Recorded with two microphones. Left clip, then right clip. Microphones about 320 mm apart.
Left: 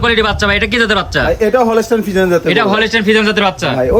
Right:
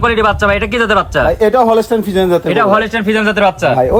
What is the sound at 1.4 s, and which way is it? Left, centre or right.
Speech, centre.